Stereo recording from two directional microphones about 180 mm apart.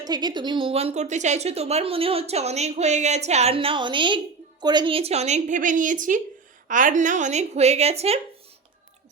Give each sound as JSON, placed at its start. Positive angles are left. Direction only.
{"t": 0.0, "sound": "speech", "side_deg": -25}